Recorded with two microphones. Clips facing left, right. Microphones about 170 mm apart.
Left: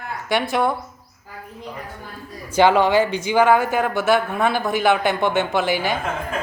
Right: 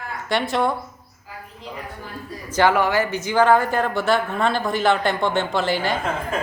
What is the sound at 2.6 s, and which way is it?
Speech, 20° left (ahead or behind).